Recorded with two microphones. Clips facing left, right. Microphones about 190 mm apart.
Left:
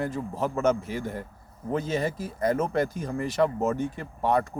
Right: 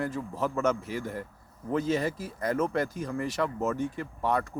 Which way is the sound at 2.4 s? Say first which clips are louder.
Left 3 dB; 25° left (ahead or behind).